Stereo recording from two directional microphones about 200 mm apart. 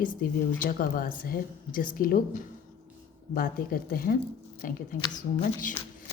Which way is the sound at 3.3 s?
45° left (ahead or behind).